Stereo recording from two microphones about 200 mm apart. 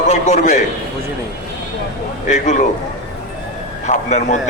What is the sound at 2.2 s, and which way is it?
Speech, 35° left (ahead or behind).